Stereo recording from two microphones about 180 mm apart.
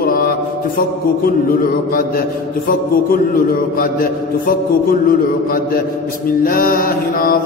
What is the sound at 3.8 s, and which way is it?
Mantra, 55° left (ahead or behind).